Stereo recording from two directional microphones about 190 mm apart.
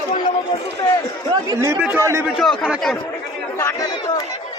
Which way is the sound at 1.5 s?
15° right (ahead or behind).